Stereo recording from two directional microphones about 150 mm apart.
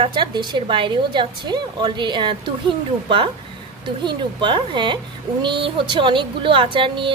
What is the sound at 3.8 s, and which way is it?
Speech, 30° right (ahead or behind).